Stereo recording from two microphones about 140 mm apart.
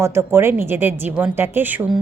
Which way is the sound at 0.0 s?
20° right (ahead or behind).